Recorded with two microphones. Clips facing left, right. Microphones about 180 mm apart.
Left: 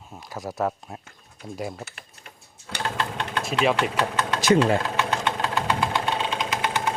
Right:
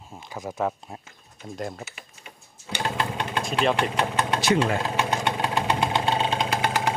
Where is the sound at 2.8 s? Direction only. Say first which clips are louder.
Right 1 dB; 10° right (ahead or behind).